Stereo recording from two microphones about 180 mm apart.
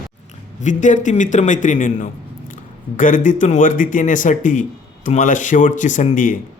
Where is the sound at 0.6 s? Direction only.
45° left (ahead or behind).